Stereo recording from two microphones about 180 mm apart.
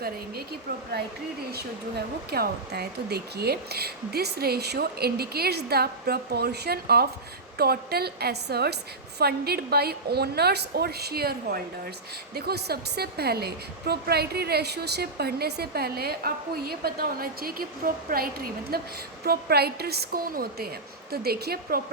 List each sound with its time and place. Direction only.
2.3 s a woman's voice: 60° right (ahead or behind)